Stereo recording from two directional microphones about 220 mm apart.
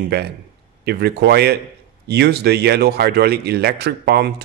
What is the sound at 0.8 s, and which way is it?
Speech, 45° right (ahead or behind).